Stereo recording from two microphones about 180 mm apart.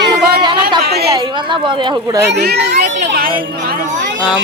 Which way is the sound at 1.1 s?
25° right (ahead or behind).